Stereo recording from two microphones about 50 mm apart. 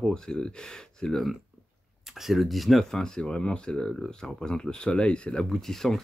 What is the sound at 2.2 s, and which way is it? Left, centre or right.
Speech, centre.